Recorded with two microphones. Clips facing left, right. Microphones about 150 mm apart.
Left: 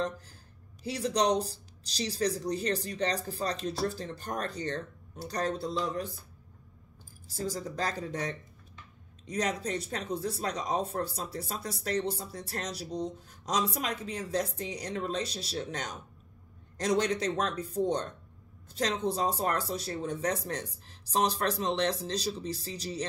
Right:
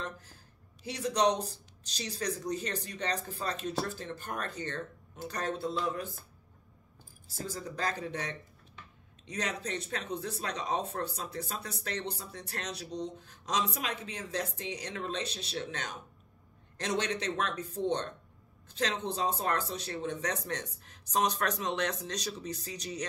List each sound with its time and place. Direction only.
0.8 s speech: 35° left (ahead or behind)
7.5 s speech: 35° left (ahead or behind)
19.0 s speech: 35° left (ahead or behind)